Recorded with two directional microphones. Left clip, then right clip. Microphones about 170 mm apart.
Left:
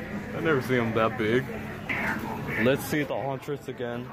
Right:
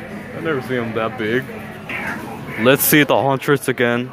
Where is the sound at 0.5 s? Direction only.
10° left (ahead or behind).